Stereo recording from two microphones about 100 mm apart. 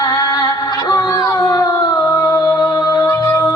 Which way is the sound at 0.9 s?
40° left (ahead or behind).